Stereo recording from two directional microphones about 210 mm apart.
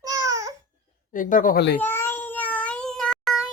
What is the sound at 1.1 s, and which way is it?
Speech, 40° left (ahead or behind).